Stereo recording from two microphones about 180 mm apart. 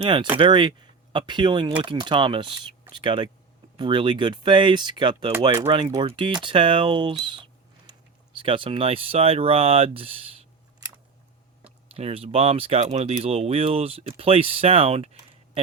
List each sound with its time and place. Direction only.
0.0 s speech: 25° right (ahead or behind)
11.9 s speech: 35° right (ahead or behind)